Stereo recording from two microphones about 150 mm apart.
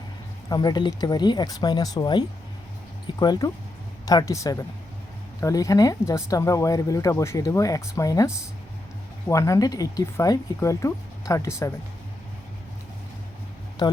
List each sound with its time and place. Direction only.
0.5 s speech: 30° left (ahead or behind)